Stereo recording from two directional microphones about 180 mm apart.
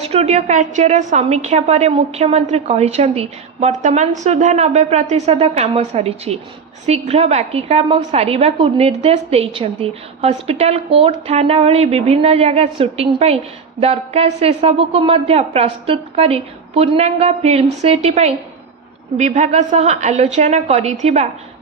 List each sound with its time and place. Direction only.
0.0 s a woman's voice: 35° right (ahead or behind)